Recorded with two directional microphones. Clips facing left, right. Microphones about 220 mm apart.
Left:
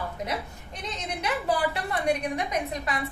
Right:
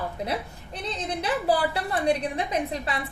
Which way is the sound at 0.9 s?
35° right (ahead or behind).